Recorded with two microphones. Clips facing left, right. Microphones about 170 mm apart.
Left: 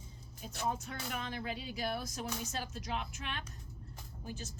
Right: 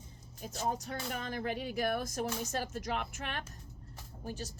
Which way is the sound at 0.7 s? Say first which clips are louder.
Right 3 dB; 40° right (ahead or behind).